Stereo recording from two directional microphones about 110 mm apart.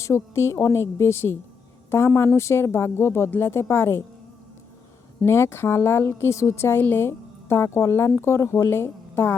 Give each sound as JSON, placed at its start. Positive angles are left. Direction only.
{"t": 0.0, "sound": "a woman's voice", "side_deg": 25}
{"t": 5.2, "sound": "a woman's voice", "side_deg": 25}